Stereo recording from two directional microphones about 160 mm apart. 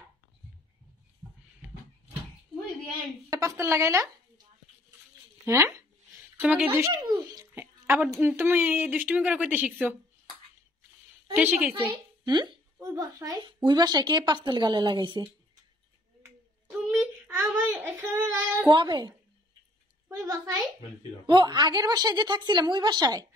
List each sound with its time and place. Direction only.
1.2 s a sound: 20° right (ahead or behind)
3.3 s a woman's voice: 20° right (ahead or behind)
5.4 s a sound: 15° right (ahead or behind)
7.8 s a woman's voice: 15° right (ahead or behind)
11.3 s a woman's voice: 10° right (ahead or behind)
12.7 s a child's voice: 20° right (ahead or behind)
16.2 s a sound: 15° right (ahead or behind)
16.7 s child singing: 10° right (ahead or behind); by 19.1 s 30° right (ahead or behind)
20.1 s a child's voice: 20° right (ahead or behind)